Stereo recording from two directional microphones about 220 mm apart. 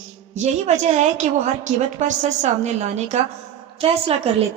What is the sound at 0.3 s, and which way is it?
A woman's voice, 30° right (ahead or behind).